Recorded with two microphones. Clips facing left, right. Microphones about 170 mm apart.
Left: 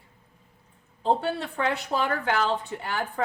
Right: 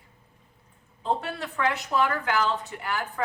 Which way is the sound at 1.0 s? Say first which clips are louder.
Left 4 dB; 30° left (ahead or behind).